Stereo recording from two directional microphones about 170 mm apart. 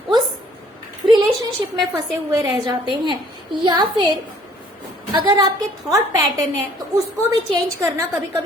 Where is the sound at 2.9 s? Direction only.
25° right (ahead or behind).